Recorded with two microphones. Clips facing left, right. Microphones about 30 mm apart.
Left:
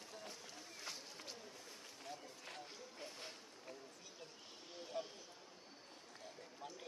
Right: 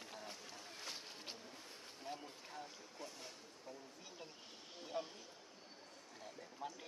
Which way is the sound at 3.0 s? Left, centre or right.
Left.